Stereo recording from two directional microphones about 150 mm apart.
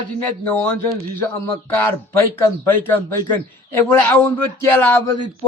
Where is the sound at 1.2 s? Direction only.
10° left (ahead or behind).